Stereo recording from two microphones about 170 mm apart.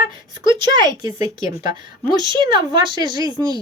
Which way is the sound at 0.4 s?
25° right (ahead or behind).